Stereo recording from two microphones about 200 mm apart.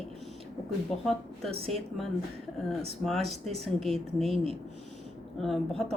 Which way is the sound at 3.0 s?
Centre (ahead or behind).